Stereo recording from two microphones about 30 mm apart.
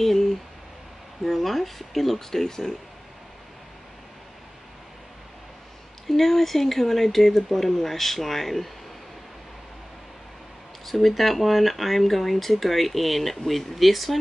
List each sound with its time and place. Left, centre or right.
0.0 s a sound: centre
1.2 s speech: centre
6.0 s speech: centre
10.9 s speech: centre